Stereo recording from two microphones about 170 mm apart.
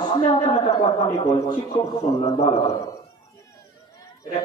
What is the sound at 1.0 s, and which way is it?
Speech, 20° left (ahead or behind).